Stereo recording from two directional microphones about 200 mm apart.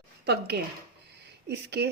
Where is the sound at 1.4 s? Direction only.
55° right (ahead or behind).